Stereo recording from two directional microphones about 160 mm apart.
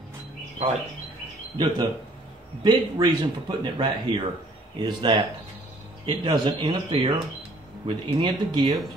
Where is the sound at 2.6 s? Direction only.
30° right (ahead or behind).